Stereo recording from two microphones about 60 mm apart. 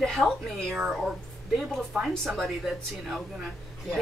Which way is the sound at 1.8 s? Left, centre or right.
Centre.